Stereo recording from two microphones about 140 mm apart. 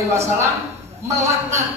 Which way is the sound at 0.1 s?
20° right (ahead or behind).